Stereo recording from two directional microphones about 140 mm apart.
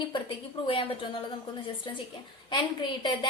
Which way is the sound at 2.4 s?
35° left (ahead or behind).